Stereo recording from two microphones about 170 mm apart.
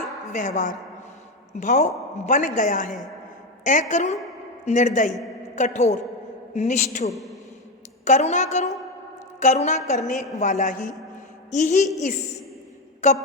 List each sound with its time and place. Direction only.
0.3 s a woman's voice: 45° left (ahead or behind)
7.1 s a man's voice: centre (ahead or behind)
8.0 s a woman's voice: 45° left (ahead or behind)
13.0 s a woman's voice: 45° left (ahead or behind)